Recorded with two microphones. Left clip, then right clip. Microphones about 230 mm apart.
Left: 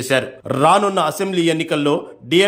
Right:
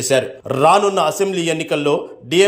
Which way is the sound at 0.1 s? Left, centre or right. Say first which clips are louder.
Right 1 dB; centre.